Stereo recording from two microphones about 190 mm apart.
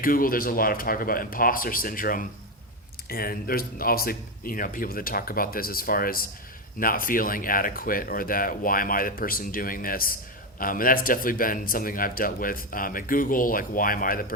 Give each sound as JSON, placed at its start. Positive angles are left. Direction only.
{"t": 0.0, "sound": "a man's voice", "side_deg": 50}